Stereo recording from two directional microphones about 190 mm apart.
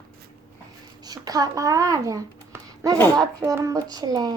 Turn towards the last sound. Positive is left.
turn(degrees=-20)  # may be behind; listen again after turning